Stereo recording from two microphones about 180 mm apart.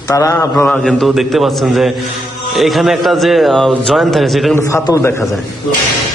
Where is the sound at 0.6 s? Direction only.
Centre (ahead or behind).